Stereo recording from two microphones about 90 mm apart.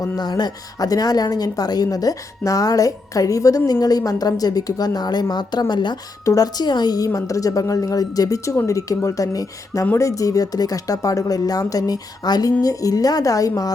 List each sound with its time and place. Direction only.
0.0 s speech: 50° left (ahead or behind)
6.2 s speech: 45° left (ahead or behind)